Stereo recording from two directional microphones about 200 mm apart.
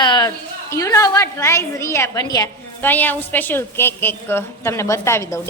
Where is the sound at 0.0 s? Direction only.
20° left (ahead or behind).